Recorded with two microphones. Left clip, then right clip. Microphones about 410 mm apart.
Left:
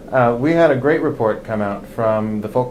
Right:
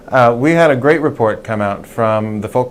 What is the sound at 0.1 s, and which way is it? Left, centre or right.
Speech, right.